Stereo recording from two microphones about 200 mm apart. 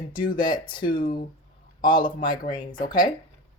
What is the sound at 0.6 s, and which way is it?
Speech, 25° left (ahead or behind).